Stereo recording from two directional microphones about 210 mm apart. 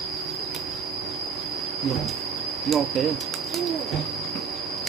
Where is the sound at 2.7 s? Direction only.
Centre (ahead or behind).